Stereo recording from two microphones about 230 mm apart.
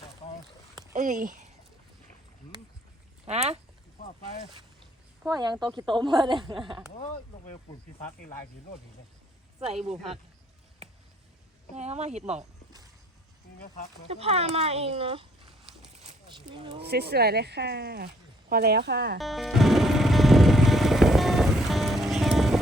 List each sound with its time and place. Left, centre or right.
0.9 s speech: right
3.2 s speech: right
5.2 s speech: centre
9.8 s speech: right
11.7 s speech: right
14.1 s speech: right
16.0 s a sound: right
16.8 s speech: right
19.2 s music: centre